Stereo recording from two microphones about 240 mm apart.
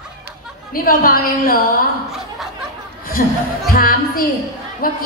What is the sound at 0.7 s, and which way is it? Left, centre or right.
Speech, left.